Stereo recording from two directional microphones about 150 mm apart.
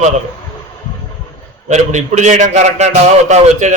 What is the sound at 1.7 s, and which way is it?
A man's voice, 50° right (ahead or behind).